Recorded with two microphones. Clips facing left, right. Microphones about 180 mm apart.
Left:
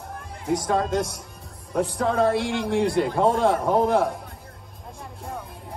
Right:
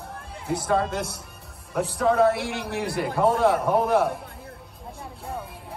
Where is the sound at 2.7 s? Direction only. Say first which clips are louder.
Left 6 dB; 25° left (ahead or behind).